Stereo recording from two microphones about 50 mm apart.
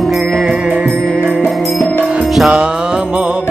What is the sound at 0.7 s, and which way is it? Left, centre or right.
Music, right.